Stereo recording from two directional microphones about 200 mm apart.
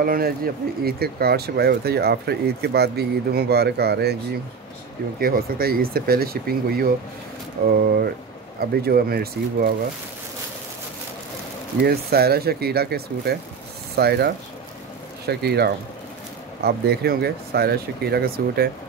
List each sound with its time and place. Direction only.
0.0 s speech: 50° right (ahead or behind)
5.2 s speech: 50° right (ahead or behind)
11.8 s speech: 50° right (ahead or behind)